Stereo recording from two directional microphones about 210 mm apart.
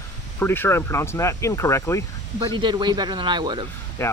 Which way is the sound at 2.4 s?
20° right (ahead or behind).